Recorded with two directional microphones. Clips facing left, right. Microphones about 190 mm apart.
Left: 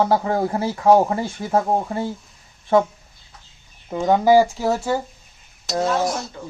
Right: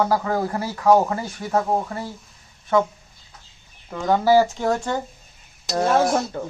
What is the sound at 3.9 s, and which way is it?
Speech, 20° left (ahead or behind).